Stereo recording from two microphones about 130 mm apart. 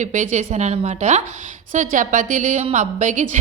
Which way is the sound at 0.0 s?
70° right (ahead or behind).